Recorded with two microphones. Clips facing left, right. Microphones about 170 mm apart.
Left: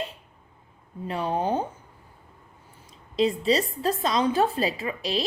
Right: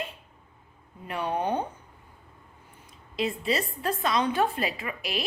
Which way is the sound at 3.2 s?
30° left (ahead or behind).